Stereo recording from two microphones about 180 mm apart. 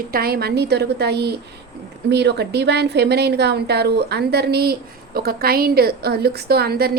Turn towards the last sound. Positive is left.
turn(degrees=-60)  # may be behind; listen again after turning